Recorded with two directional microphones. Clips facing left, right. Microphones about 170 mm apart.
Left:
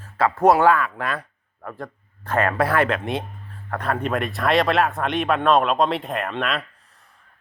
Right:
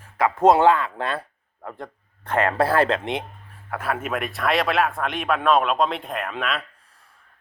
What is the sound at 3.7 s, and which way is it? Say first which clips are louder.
Speech: left 2 dB; 5° right (ahead or behind).